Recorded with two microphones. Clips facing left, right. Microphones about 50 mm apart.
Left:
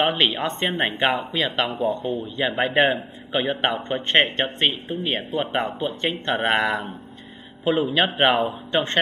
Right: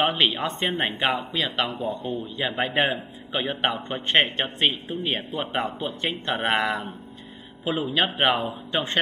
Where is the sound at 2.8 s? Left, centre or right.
Centre.